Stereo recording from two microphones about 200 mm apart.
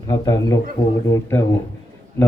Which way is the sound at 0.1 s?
15° left (ahead or behind).